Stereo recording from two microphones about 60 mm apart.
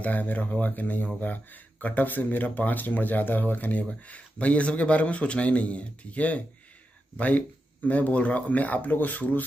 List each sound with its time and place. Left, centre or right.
0.0 s speech: left